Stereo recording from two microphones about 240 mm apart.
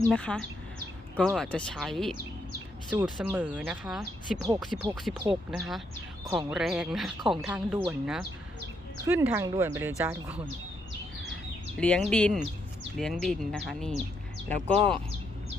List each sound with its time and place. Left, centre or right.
0.1 s speech: centre
11.8 s speech: centre